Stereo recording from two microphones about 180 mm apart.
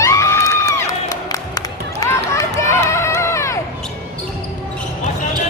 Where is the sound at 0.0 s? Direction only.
15° left (ahead or behind).